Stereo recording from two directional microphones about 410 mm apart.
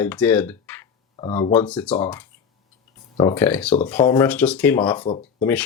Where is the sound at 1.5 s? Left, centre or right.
Centre.